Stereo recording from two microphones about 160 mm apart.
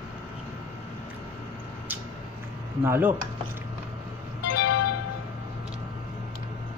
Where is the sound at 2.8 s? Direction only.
15° right (ahead or behind).